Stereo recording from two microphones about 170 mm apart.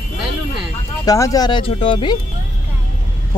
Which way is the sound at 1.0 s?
20° left (ahead or behind).